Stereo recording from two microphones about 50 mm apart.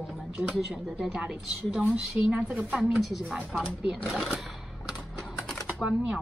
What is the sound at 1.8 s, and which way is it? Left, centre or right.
A woman's voice, right.